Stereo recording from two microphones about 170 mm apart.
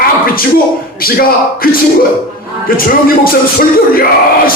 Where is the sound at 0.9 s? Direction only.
60° left (ahead or behind).